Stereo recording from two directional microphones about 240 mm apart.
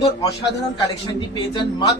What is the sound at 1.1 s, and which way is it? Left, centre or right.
Speech, centre.